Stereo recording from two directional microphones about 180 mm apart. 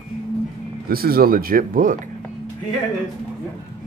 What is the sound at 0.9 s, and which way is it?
Speech, 55° right (ahead or behind).